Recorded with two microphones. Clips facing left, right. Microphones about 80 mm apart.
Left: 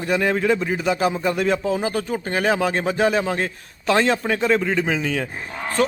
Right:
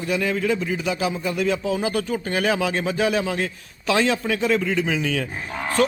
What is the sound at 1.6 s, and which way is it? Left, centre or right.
Speech, left.